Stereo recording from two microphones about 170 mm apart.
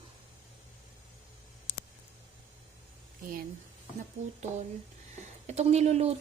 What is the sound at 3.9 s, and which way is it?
A woman's voice, 40° right (ahead or behind).